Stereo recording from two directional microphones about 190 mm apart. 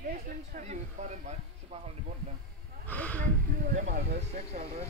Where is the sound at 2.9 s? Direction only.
5° left (ahead or behind).